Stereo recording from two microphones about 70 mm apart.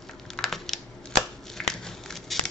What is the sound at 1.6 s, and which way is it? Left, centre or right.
Biting, centre.